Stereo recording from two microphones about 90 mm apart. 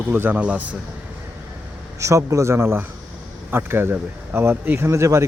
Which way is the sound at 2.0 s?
35° right (ahead or behind).